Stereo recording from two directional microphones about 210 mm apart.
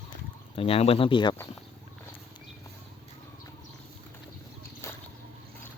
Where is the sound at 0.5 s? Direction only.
25° left (ahead or behind).